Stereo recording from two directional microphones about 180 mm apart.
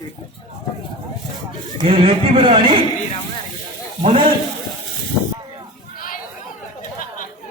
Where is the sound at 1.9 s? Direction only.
30° right (ahead or behind).